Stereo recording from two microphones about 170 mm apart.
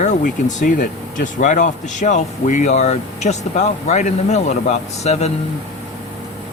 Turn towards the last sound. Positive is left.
turn(degrees=40)  # may be behind; listen again after turning